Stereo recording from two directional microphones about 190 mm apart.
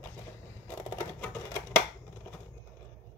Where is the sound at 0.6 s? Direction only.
10° left (ahead or behind).